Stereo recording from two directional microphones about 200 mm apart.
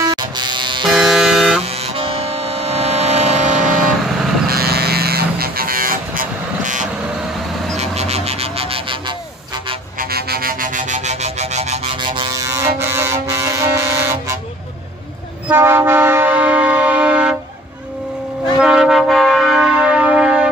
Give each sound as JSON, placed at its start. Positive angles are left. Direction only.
{"t": 0.1, "sound": "electric shaver", "side_deg": -20}
{"t": 0.9, "sound": "vehicle", "side_deg": 0}
{"t": 1.6, "sound": "vehicle", "side_deg": -30}
{"t": 4.5, "sound": "vehicle", "side_deg": -50}
{"t": 9.9, "sound": "music", "side_deg": -50}
{"t": 15.4, "sound": "train", "side_deg": -10}
{"t": 18.6, "sound": "train", "side_deg": 0}